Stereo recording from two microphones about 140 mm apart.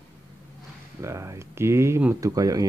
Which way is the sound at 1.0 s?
20° right (ahead or behind).